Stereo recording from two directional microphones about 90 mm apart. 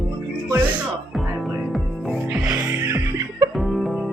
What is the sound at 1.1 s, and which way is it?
Music, centre (ahead or behind).